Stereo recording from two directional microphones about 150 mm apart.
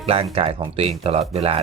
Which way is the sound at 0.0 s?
40° right (ahead or behind).